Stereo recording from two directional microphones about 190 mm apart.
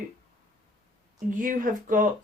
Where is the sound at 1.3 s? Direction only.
45° right (ahead or behind).